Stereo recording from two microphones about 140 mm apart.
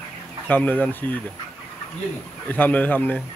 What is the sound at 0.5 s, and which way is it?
Speech, 10° left (ahead or behind).